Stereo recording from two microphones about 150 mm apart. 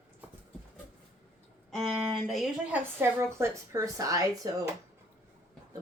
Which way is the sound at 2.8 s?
15° right (ahead or behind).